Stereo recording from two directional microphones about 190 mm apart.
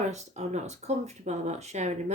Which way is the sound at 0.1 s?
35° right (ahead or behind).